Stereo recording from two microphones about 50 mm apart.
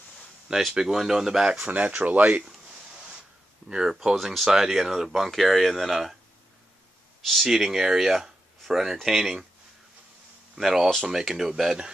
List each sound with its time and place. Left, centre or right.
0.7 s speech: centre
1.5 s speech: right
3.6 s speech: centre
7.2 s a sound: centre
7.4 s speech: centre
10.5 s speech: centre